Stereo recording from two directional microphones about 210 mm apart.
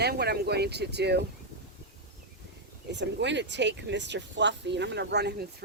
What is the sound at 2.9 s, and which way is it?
Speech, 55° right (ahead or behind).